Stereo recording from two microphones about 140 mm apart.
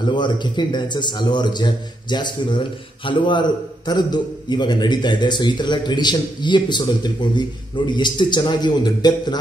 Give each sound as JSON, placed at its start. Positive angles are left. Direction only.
{"t": 0.0, "sound": "a man's voice", "side_deg": 35}